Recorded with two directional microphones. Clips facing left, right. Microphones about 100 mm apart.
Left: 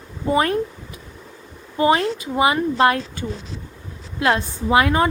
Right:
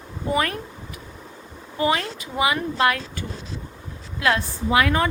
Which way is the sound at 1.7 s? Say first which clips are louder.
Left 5 dB; 30° left (ahead or behind).